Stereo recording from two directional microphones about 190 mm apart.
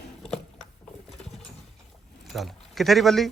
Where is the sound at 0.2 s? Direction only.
5° left (ahead or behind).